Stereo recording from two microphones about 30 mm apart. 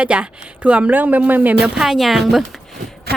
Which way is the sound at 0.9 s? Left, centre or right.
Right.